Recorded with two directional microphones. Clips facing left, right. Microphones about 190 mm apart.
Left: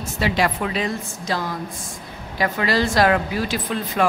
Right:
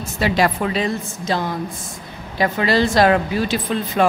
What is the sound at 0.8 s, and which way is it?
Speech, 25° right (ahead or behind).